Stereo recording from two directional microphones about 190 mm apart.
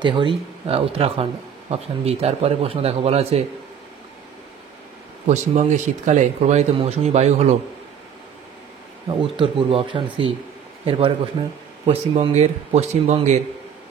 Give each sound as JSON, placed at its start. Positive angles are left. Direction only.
{"t": 0.0, "sound": "speech", "side_deg": -25}
{"t": 5.2, "sound": "speech", "side_deg": -40}
{"t": 9.1, "sound": "speech", "side_deg": -25}